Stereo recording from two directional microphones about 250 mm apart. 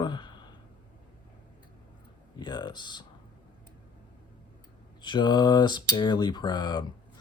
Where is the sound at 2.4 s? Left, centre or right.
Centre.